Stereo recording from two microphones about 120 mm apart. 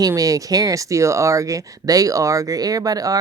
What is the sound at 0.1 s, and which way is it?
Speech, 30° right (ahead or behind).